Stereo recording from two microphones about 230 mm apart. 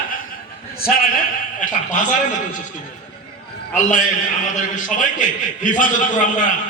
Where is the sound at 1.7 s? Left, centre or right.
Left.